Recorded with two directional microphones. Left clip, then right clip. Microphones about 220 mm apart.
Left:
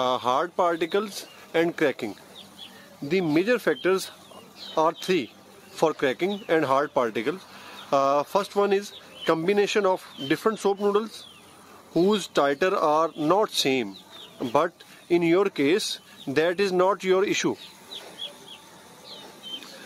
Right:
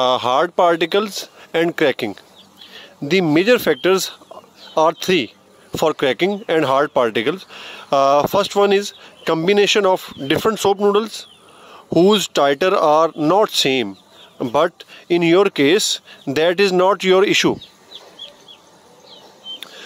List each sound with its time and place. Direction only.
0.0 s speech: 35° right (ahead or behind)